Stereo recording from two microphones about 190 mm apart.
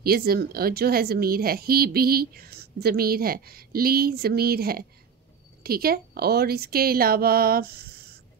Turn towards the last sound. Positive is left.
turn(degrees=-55)  # may be behind; listen again after turning